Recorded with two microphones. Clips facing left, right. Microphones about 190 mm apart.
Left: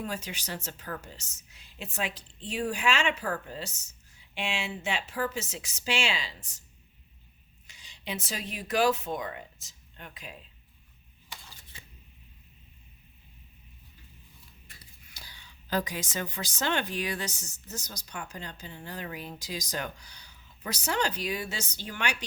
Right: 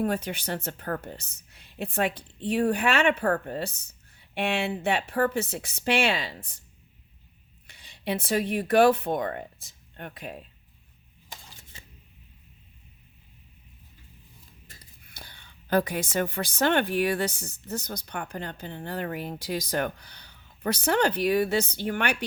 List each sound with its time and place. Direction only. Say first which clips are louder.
0.0 s speech: right 9 dB; 55° right (ahead or behind)
7.7 s speech: right 8 dB; 55° right (ahead or behind)
14.7 s speech: right 2 dB; 50° right (ahead or behind)